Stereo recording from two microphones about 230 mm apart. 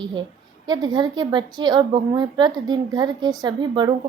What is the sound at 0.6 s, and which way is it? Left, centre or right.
A woman's voice, centre.